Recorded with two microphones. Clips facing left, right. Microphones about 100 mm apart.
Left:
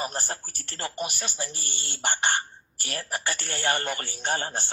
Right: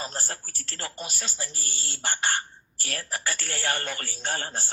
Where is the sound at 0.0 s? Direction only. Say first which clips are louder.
Left 3 dB; 15° left (ahead or behind).